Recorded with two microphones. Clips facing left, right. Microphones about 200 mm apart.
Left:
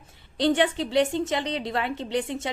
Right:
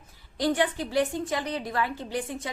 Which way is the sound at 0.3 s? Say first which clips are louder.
Left 3 dB; 25° left (ahead or behind).